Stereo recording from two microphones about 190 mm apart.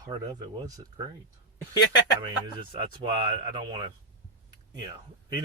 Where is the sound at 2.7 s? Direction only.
25° right (ahead or behind).